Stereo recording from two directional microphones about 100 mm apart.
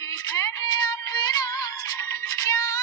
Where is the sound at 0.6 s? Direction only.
45° left (ahead or behind).